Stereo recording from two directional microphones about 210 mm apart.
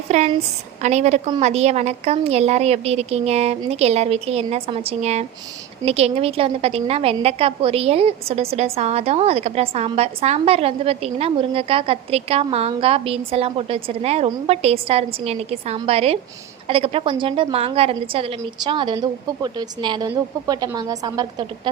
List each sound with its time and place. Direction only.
0.1 s a woman's voice: 30° right (ahead or behind)